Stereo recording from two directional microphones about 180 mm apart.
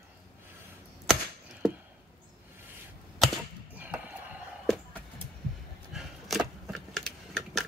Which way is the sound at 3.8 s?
10° right (ahead or behind).